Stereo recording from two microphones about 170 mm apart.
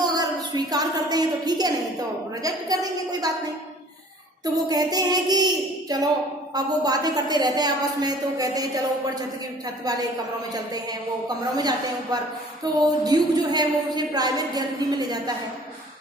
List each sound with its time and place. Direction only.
0.0 s a woman's voice: 20° right (ahead or behind)
4.5 s a woman's voice: 20° right (ahead or behind)
10.5 s a woman's voice: 25° right (ahead or behind)
12.8 s a woman's voice: 25° right (ahead or behind)